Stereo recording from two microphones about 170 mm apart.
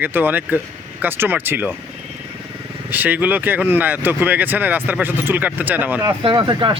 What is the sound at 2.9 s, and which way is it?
Speech, 10° right (ahead or behind).